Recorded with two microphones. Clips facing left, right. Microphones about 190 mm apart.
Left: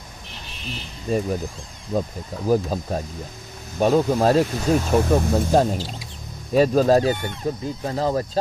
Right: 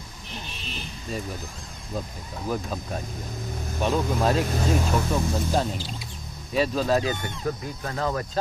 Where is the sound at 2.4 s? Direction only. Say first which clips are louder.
Left 9 dB; 35° left (ahead or behind).